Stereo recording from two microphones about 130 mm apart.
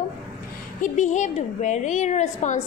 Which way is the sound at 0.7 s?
70° left (ahead or behind).